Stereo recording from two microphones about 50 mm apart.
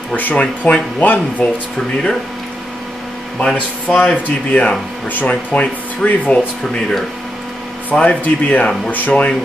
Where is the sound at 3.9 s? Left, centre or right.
Left.